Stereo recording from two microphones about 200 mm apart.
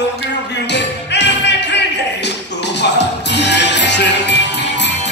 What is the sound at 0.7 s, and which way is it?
Music, 60° left (ahead or behind).